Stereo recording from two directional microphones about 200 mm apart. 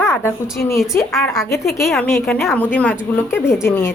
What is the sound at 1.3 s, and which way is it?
A woman's voice, centre (ahead or behind).